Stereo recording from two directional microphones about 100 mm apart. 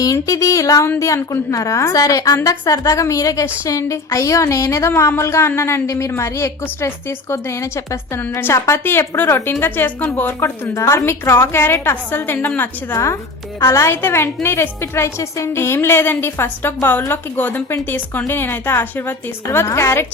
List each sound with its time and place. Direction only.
0.0 s a woman's voice: 35° left (ahead or behind)
12.9 s a woman's voice: 30° left (ahead or behind)